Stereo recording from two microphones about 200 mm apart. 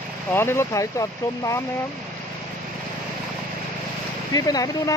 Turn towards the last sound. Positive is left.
turn(degrees=20)  # may be behind; listen again after turning